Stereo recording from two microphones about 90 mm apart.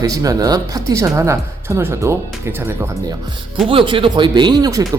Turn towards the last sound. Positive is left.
turn(degrees=-40)  # may be behind; listen again after turning